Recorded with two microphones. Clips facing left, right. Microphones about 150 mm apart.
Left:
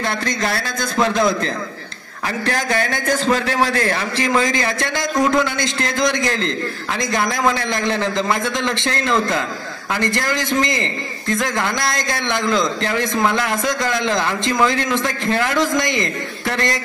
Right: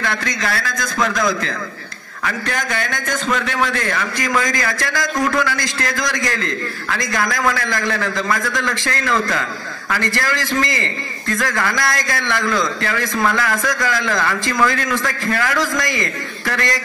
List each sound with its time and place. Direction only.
0.0 s a man's voice: 30° left (ahead or behind)